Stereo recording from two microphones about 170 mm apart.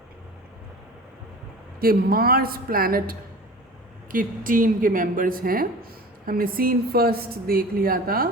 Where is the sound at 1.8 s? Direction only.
60° right (ahead or behind).